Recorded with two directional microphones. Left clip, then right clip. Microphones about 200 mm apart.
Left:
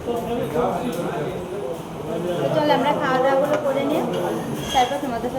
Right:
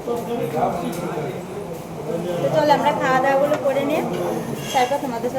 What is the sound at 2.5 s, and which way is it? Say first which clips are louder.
Speech: right 3 dB; 20° right (ahead or behind).